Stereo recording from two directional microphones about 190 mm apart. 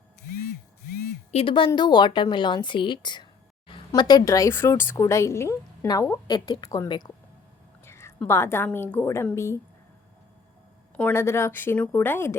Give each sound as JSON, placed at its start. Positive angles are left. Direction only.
{"t": 1.3, "sound": "a woman's voice", "side_deg": 30}
{"t": 10.9, "sound": "speech", "side_deg": 10}